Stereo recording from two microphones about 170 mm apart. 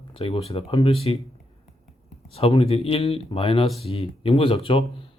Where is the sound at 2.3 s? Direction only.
35° left (ahead or behind).